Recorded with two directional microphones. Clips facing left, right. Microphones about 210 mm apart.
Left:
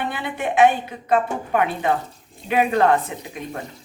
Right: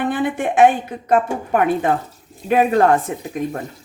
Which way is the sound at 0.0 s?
50° right (ahead or behind).